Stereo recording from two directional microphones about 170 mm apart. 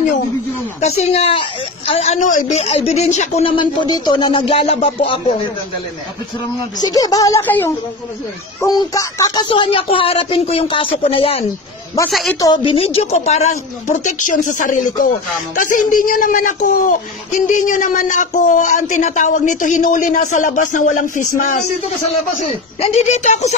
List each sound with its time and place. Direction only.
0.7 s speech: 40° left (ahead or behind)
6.8 s speech: 20° left (ahead or behind)
12.1 s a woman's voice: centre (ahead or behind)
12.4 s speech: 20° left (ahead or behind)
12.7 s speech: 35° left (ahead or behind)
22.5 s speech: 35° left (ahead or behind)